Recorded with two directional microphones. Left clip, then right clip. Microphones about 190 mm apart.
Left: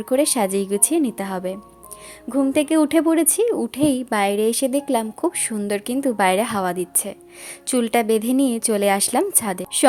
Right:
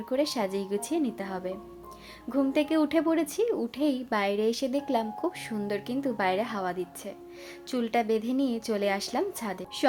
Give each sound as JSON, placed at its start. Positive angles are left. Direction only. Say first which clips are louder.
{"t": 0.0, "sound": "a woman's voice", "louder": "left 9 dB", "side_deg": 35}